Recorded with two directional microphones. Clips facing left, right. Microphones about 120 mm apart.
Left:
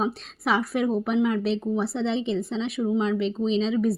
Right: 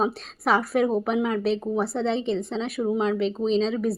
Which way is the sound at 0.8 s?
40° right (ahead or behind).